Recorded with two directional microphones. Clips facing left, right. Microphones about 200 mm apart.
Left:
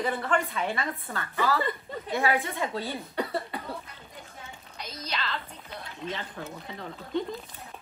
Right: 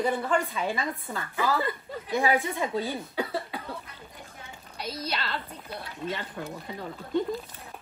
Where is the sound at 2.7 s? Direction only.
Centre (ahead or behind).